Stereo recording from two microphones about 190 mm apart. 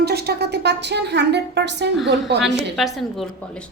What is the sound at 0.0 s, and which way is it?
A woman's voice, 55° right (ahead or behind).